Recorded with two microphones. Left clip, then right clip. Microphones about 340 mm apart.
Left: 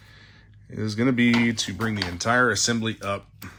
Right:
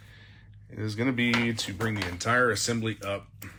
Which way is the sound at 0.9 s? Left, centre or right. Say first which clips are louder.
Left 5 dB; left.